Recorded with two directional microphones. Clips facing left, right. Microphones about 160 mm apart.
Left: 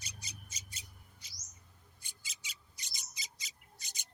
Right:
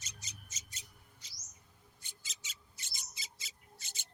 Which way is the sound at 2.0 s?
10° left (ahead or behind).